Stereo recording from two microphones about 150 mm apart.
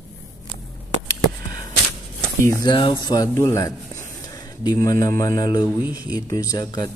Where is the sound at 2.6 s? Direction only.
35° left (ahead or behind).